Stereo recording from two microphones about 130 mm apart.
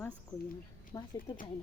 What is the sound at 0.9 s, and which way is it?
Speech, 15° left (ahead or behind).